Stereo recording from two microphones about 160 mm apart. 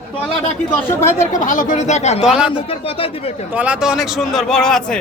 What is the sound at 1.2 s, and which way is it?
Speech, 50° left (ahead or behind).